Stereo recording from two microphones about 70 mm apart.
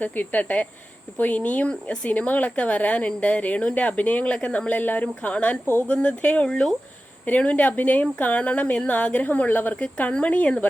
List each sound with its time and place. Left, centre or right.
0.0 s speech: left
2.1 s speech: left
7.3 s speech: left